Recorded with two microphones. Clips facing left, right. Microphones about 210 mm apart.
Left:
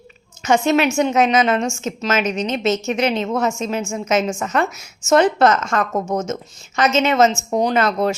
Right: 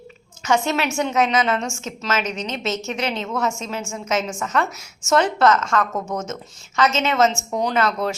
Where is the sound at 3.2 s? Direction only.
30° left (ahead or behind).